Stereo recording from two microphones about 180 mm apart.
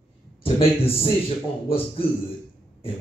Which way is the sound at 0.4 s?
30° left (ahead or behind).